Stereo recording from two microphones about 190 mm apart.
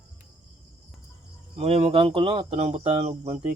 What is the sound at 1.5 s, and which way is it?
Speech, 35° right (ahead or behind).